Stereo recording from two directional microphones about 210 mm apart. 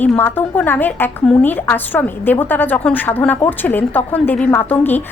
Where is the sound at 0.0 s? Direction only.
10° left (ahead or behind).